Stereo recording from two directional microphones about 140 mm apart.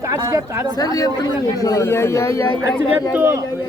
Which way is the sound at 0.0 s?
20° right (ahead or behind).